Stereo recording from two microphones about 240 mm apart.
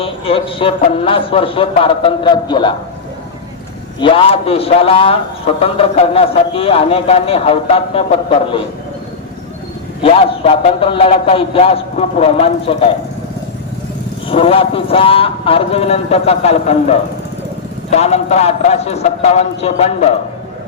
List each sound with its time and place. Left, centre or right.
0.0 s a man's voice: left
4.0 s a man's voice: left
10.0 s a man's voice: left
14.3 s a man's voice: left